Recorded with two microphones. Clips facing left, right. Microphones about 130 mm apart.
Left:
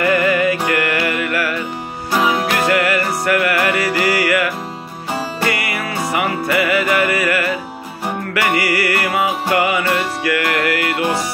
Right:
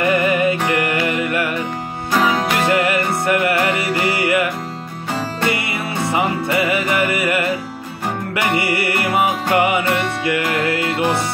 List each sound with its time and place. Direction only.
0.0 s music: 20° right (ahead or behind)
5.5 s music: 25° right (ahead or behind)
8.5 s music: 25° right (ahead or behind)